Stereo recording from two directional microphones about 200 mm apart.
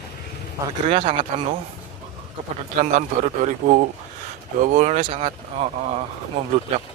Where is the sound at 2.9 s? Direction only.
40° right (ahead or behind).